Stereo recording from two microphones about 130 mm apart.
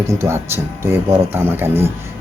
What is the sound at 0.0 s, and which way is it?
Speech, 20° right (ahead or behind).